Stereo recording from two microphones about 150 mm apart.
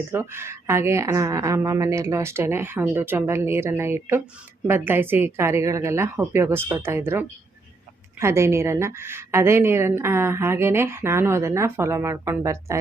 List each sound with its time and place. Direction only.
0.1 s a woman's voice: 15° right (ahead or behind)